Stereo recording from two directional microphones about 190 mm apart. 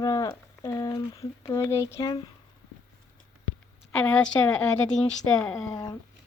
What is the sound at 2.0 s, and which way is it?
Speech, 25° left (ahead or behind).